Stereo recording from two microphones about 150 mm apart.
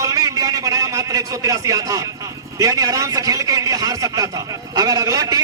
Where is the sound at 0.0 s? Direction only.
20° right (ahead or behind).